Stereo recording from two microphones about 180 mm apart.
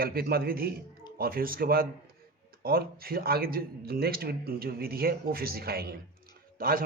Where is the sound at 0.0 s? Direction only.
55° right (ahead or behind).